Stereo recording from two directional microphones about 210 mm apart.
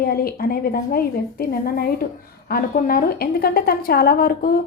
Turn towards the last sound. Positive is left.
turn(degrees=45)  # may be behind; listen again after turning